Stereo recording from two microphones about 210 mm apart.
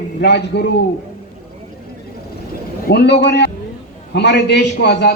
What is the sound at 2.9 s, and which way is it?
A man's voice, 50° left (ahead or behind).